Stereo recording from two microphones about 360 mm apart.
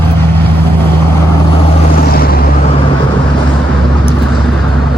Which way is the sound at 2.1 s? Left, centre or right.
Left.